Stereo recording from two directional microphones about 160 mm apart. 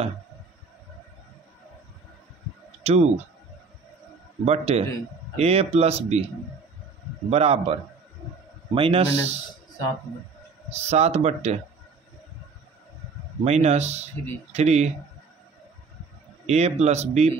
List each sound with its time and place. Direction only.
2.8 s speech: 40° right (ahead or behind)
4.5 s speech: 40° right (ahead or behind)
7.2 s speech: 40° right (ahead or behind)
8.7 s speech: 35° right (ahead or behind)
10.7 s speech: 45° right (ahead or behind)
13.4 s speech: 40° right (ahead or behind)
16.4 s speech: 45° right (ahead or behind)